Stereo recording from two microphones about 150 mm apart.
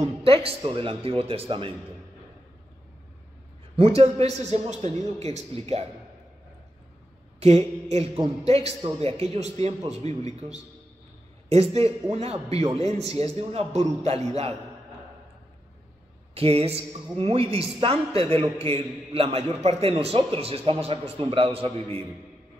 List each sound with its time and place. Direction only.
0.0 s a woman's voice: 40° right (ahead or behind)
3.7 s a woman's voice: 40° right (ahead or behind)
7.3 s a woman's voice: 45° right (ahead or behind)
11.4 s a woman's voice: 45° right (ahead or behind)
16.3 s a woman's voice: 40° right (ahead or behind)